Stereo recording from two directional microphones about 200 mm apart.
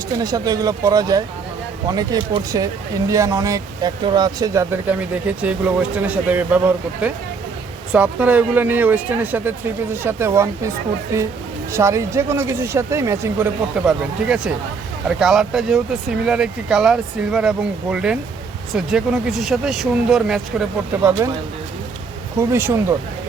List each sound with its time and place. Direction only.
0.2 s speech: 20° right (ahead or behind)
13.8 s speech: 5° right (ahead or behind)
21.0 s speech: 15° right (ahead or behind)
22.4 s speech: 10° right (ahead or behind)